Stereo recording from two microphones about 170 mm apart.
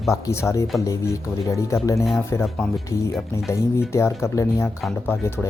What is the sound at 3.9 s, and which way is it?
Speech, 15° left (ahead or behind).